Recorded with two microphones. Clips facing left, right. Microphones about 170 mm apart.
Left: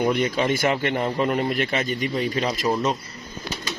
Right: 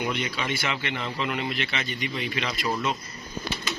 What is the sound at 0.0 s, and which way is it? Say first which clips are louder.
A man's voice: left 8 dB; 45° left (ahead or behind).